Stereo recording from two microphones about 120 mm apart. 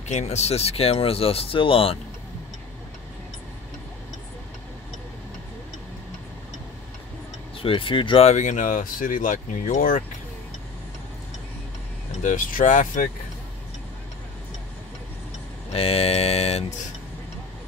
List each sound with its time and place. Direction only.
0.1 s speech: 65° left (ahead or behind); by 2.0 s 50° left (ahead or behind)
7.5 s speech: 50° left (ahead or behind)
8.3 s speech: 85° left
12.2 s speech: 90° left
15.7 s mantra: 55° left (ahead or behind)